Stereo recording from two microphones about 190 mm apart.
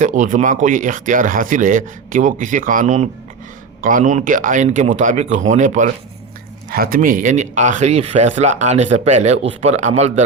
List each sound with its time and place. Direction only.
0.0 s speech: 40° right (ahead or behind)